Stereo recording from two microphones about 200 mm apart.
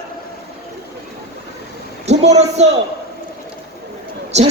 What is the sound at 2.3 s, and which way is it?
Speech, 35° right (ahead or behind).